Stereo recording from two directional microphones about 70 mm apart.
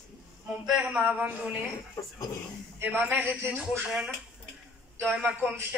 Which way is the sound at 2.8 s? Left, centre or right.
Right.